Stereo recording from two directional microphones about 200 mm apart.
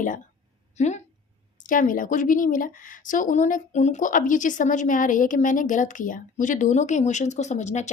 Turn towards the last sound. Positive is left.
turn(degrees=35)  # may be behind; listen again after turning